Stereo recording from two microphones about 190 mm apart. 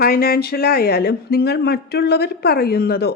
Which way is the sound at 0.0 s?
50° left (ahead or behind).